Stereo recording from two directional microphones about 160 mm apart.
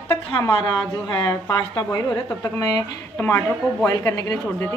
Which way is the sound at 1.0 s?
25° left (ahead or behind).